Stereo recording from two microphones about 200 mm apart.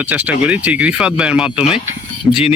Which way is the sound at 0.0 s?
10° right (ahead or behind).